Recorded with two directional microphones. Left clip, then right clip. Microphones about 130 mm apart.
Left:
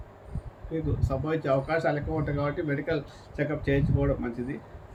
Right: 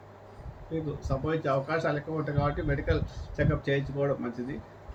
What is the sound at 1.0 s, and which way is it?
Speech, 15° left (ahead or behind).